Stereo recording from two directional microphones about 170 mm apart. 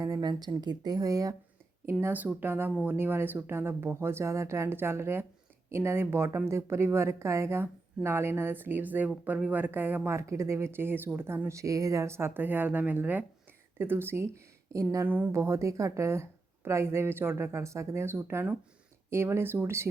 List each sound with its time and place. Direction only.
0.0 s a woman's voice: 20° right (ahead or behind)